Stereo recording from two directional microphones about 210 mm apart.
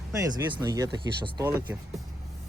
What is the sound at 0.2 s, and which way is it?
Speech, 15° right (ahead or behind).